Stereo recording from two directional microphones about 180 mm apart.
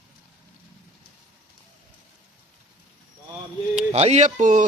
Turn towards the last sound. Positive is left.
turn(degrees=-45)  # may be behind; listen again after turning